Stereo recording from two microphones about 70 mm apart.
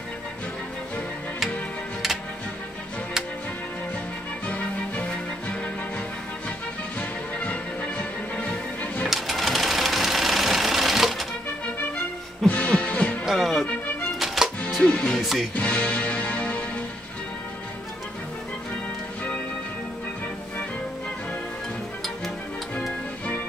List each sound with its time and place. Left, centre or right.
4.5 s music: centre
9.0 s sewing machine: centre
12.4 s music: centre
13.2 s music: centre
14.8 s music: centre
15.1 s music: centre
15.5 s music: centre